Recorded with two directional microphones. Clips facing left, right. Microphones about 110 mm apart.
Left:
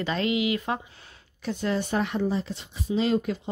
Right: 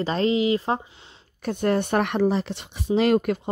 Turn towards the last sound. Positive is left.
turn(degrees=-65)  # may be behind; listen again after turning